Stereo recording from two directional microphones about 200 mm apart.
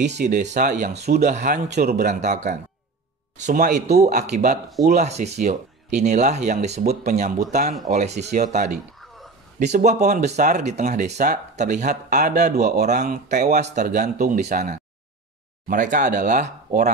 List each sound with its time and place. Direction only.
0.2 s speech: 35° right (ahead or behind)